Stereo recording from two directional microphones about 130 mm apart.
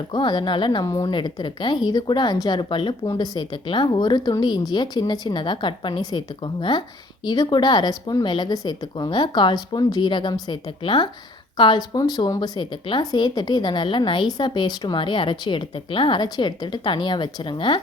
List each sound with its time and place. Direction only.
0.1 s a woman's voice: 35° left (ahead or behind)